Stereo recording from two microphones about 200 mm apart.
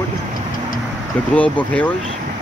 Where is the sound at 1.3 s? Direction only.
5° left (ahead or behind).